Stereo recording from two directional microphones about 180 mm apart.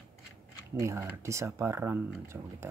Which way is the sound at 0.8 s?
15° right (ahead or behind).